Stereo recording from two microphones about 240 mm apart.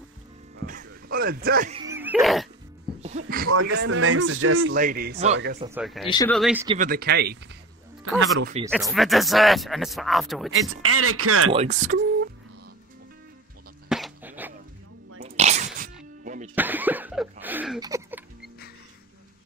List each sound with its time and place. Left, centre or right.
0.7 s a sound: right
1.9 s a sound: centre
3.4 s speech: right
3.7 s speech: right
4.7 s speech: right
5.8 s speech: centre
6.8 s speech: right
8.6 s speech: centre
10.5 s speech: right
11.5 s speech: right
13.8 s a sound: centre
15.1 s sneeze: right
16.5 s a sound: centre